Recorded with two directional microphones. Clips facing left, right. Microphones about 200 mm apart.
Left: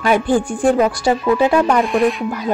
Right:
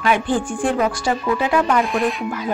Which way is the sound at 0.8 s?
40° left (ahead or behind).